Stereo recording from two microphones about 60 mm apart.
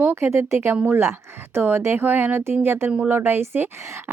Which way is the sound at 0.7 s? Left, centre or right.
Right.